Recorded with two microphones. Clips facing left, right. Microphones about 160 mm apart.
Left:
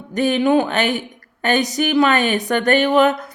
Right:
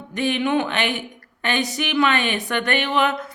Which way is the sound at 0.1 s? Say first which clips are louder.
Left 5 dB; 40° left (ahead or behind).